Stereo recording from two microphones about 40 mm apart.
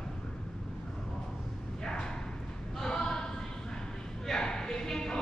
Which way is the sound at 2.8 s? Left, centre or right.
Centre.